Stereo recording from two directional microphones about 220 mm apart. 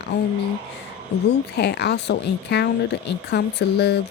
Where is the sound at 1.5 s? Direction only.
50° left (ahead or behind).